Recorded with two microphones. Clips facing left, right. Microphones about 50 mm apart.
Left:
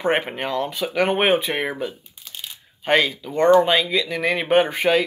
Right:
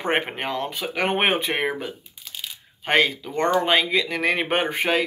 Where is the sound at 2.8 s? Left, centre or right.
Right.